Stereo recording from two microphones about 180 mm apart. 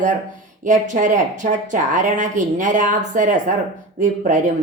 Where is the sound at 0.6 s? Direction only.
45° right (ahead or behind).